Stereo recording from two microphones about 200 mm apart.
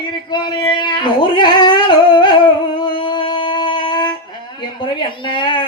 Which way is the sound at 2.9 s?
25° left (ahead or behind).